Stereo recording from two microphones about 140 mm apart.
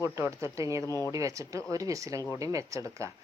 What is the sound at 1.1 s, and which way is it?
Speech, 25° right (ahead or behind).